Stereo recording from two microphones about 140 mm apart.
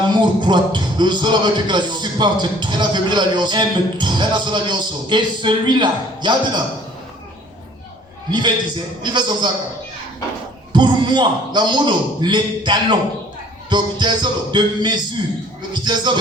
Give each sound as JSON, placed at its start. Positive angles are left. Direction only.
{"t": 0.1, "sound": "music", "side_deg": -35}
{"t": 8.3, "sound": "music", "side_deg": -30}
{"t": 10.7, "sound": "music", "side_deg": -35}